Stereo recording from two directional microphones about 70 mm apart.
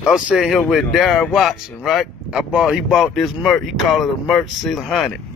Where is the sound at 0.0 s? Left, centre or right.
Centre.